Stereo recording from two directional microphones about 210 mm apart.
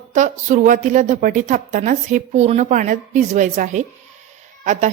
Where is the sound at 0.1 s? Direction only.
35° right (ahead or behind).